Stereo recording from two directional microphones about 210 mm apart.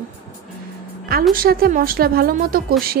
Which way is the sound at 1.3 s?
45° right (ahead or behind).